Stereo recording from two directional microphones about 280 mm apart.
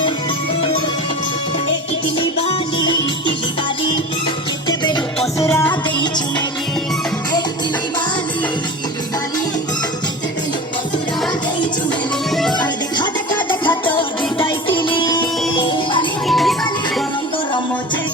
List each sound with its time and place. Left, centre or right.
2.1 s music: centre
4.7 s music: centre
12.3 s music: centre
12.5 s music: centre
16.2 s music: centre